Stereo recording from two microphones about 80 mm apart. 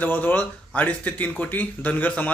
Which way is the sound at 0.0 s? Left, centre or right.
Left.